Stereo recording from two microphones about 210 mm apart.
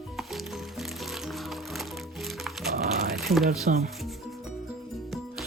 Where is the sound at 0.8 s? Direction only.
Centre (ahead or behind).